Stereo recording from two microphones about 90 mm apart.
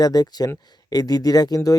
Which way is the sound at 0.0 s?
45° left (ahead or behind).